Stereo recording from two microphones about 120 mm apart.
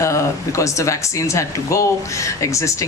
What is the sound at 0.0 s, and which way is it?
Speech, 25° left (ahead or behind).